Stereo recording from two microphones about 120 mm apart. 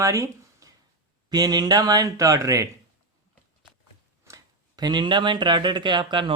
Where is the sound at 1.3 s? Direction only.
35° right (ahead or behind).